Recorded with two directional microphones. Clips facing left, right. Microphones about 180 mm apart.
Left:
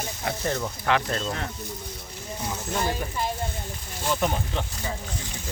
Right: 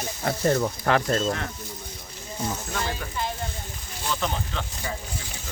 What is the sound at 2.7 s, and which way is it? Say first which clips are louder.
Speech: left 3 dB; 15° left (ahead or behind).